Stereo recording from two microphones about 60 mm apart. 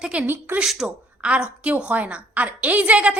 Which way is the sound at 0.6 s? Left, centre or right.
Centre.